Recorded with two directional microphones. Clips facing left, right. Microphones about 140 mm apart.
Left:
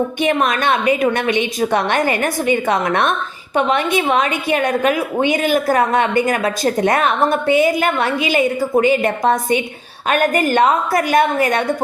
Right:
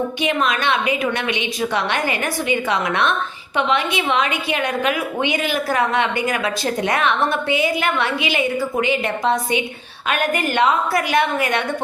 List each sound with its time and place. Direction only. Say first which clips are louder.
0.2 s a woman's voice: left 4 dB; 50° left (ahead or behind)